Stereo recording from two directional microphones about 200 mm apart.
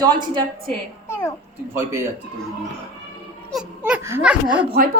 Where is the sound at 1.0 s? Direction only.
15° left (ahead or behind).